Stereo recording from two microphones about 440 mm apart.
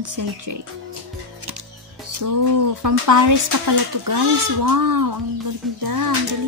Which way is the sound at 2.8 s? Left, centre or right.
Right.